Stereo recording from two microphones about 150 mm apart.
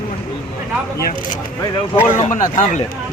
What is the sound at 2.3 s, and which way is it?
Speech, 55° left (ahead or behind).